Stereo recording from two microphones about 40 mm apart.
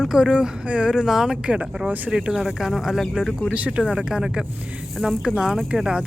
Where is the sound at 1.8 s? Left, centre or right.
Right.